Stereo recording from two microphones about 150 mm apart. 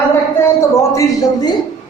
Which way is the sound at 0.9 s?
20° left (ahead or behind).